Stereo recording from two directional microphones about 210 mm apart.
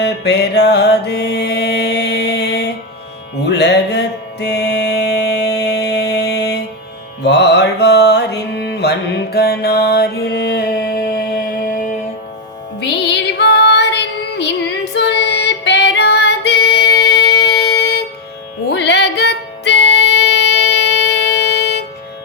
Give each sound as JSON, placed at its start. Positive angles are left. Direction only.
{"t": 0.0, "sound": "music", "side_deg": 55}
{"t": 3.4, "sound": "mantra", "side_deg": 55}
{"t": 7.2, "sound": "music", "side_deg": 55}
{"t": 12.8, "sound": "female singing", "side_deg": 55}
{"t": 18.7, "sound": "music", "side_deg": 55}